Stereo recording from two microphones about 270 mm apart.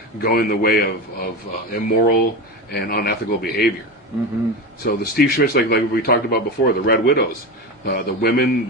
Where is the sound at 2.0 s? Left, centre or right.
Left.